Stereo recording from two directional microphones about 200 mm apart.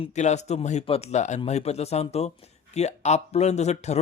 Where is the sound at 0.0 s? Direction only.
35° left (ahead or behind).